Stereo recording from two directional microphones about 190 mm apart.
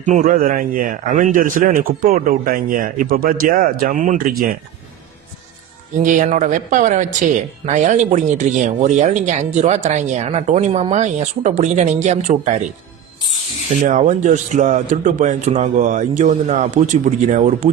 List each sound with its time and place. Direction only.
0.0 s speech: 40° right (ahead or behind)
6.0 s speech: 40° right (ahead or behind)
13.8 s speech: 40° right (ahead or behind)